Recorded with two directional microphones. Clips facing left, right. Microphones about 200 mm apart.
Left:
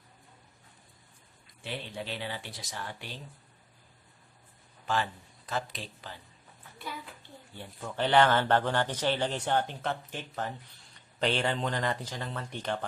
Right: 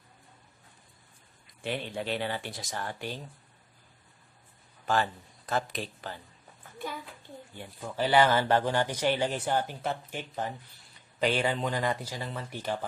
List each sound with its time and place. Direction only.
1.6 s speech: 55° right (ahead or behind)
5.5 s speech: 50° right (ahead or behind)
7.5 s speech: 10° right (ahead or behind)